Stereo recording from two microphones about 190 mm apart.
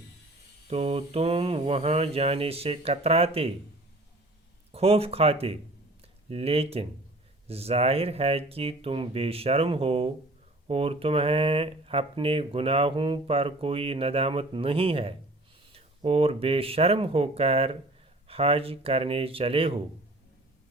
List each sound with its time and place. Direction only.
0.7 s speech: 30° right (ahead or behind)
4.7 s speech: 30° right (ahead or behind)